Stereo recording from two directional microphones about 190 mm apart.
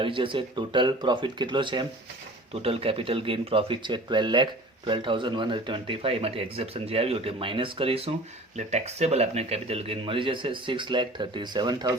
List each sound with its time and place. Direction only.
0.0 s speech: 25° right (ahead or behind)